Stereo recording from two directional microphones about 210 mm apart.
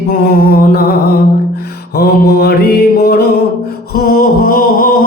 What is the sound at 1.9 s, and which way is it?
Music, 50° left (ahead or behind).